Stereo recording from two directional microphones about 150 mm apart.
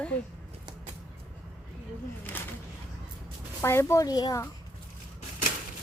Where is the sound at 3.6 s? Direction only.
20° left (ahead or behind).